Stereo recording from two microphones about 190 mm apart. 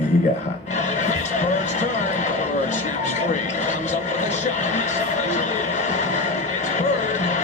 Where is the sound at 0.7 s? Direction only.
40° left (ahead or behind).